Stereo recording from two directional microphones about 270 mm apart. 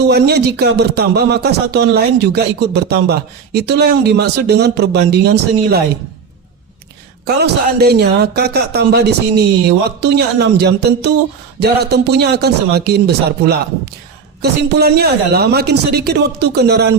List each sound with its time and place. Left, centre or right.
0.0 s speech: right
7.3 s speech: right